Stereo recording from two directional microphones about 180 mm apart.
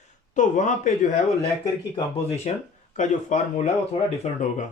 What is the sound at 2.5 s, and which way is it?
Speech, 40° left (ahead or behind).